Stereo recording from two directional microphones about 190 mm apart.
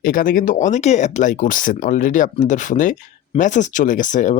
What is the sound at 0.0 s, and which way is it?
Speech, 50° left (ahead or behind).